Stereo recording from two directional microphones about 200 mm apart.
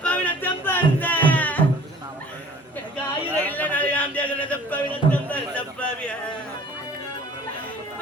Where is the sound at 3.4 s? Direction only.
10° left (ahead or behind).